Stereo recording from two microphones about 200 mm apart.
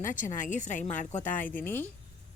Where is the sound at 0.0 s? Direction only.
40° left (ahead or behind).